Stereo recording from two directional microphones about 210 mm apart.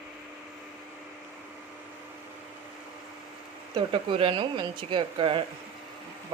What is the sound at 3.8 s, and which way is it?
Speech, 25° right (ahead or behind).